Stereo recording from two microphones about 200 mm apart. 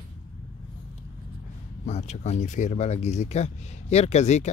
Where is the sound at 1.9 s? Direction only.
35° left (ahead or behind).